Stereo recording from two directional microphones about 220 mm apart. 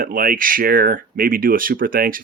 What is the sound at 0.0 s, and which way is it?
Speech, 40° right (ahead or behind).